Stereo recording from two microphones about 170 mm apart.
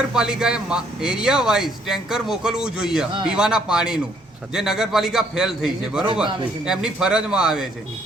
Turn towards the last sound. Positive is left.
turn(degrees=-5)  # may be behind; listen again after turning